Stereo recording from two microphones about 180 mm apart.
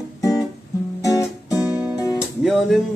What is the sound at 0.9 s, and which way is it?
Music, 20° left (ahead or behind).